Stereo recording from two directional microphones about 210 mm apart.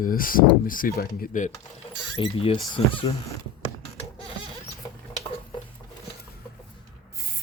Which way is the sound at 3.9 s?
25° left (ahead or behind).